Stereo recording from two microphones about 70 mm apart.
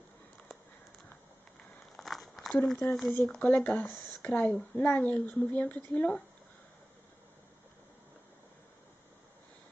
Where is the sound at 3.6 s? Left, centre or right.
Left.